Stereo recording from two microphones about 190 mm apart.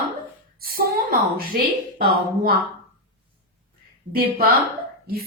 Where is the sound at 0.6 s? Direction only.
50° right (ahead or behind).